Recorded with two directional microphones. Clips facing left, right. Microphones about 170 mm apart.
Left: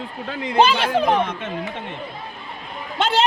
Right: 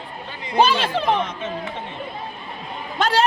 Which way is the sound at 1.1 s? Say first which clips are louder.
Left 3 dB; 55° left (ahead or behind).